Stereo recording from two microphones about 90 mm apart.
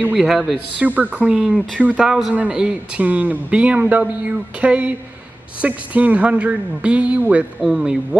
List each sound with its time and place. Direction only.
0.1 s speech: 5° right (ahead or behind)
0.7 s speech: 20° right (ahead or behind)